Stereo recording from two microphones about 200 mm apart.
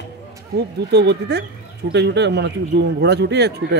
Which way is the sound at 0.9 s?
60° right (ahead or behind).